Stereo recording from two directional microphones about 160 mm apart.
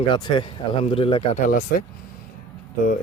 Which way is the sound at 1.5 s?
55° left (ahead or behind).